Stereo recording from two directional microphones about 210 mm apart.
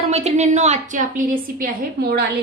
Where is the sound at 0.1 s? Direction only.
30° right (ahead or behind).